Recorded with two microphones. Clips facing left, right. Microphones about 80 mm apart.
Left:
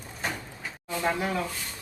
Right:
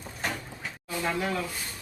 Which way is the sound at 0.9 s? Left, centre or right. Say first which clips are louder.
Left 2 dB; left.